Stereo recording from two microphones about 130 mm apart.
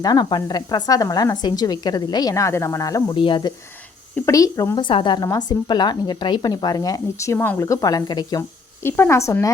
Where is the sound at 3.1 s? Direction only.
40° left (ahead or behind).